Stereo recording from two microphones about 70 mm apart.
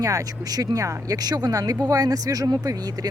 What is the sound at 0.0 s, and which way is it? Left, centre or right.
Speech, right.